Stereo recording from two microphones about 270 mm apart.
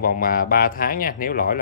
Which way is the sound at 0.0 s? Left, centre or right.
Left.